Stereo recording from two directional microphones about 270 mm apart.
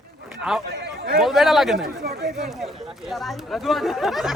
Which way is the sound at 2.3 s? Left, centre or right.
Centre.